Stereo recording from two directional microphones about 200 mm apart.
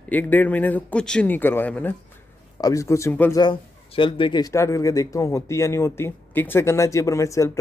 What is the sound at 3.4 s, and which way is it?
A man's voice, 25° left (ahead or behind).